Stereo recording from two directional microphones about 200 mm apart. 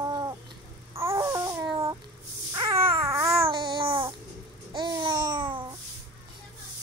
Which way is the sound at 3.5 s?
25° right (ahead or behind).